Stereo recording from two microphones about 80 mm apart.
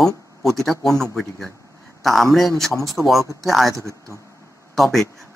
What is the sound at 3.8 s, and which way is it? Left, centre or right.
Speech, right.